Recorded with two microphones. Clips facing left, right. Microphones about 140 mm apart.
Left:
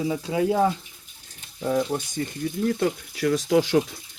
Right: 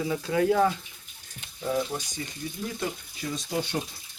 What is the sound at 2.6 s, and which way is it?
Speech, 65° left (ahead or behind).